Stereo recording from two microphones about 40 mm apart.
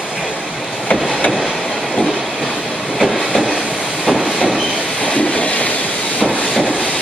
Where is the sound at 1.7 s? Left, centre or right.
Centre.